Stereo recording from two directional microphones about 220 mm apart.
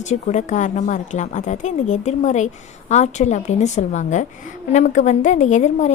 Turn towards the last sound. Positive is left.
turn(degrees=35)  # may be behind; listen again after turning